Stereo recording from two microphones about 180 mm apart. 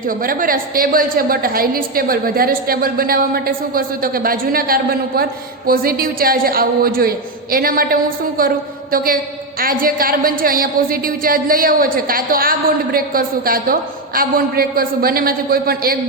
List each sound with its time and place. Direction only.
0.1 s a woman's voice: 50° right (ahead or behind)